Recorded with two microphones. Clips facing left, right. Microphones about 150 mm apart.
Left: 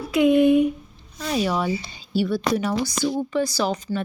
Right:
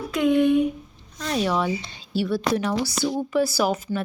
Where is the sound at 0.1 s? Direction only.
10° left (ahead or behind).